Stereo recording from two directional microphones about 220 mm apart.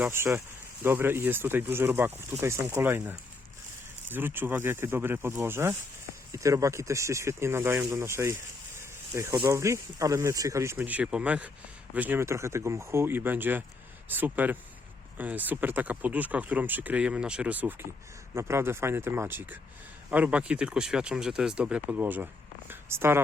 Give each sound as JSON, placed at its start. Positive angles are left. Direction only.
{"t": 0.0, "sound": "speech", "side_deg": -10}